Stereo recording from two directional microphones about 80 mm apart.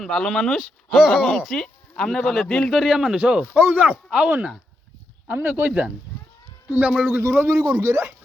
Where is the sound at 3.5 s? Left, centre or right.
Right.